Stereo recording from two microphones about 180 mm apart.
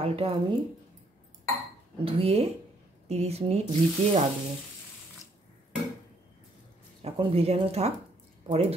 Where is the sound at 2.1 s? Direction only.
35° right (ahead or behind).